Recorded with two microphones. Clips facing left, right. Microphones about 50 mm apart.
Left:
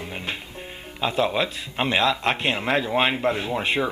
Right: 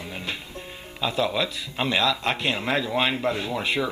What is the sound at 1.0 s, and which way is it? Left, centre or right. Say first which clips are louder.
Speech: left 2 dB; left.